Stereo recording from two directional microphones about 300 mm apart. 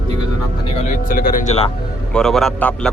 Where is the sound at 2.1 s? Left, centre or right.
Centre.